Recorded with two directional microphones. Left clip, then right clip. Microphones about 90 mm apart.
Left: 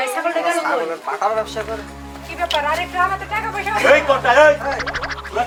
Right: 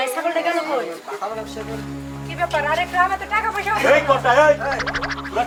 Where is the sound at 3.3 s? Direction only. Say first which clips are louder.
Right 1 dB; 5° right (ahead or behind).